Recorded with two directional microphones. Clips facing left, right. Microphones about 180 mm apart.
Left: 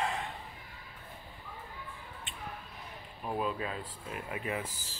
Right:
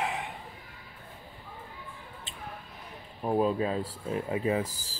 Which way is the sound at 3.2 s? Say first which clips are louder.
Right 8 dB; 35° right (ahead or behind).